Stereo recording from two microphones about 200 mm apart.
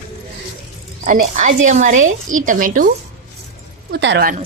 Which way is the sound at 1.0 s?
40° right (ahead or behind).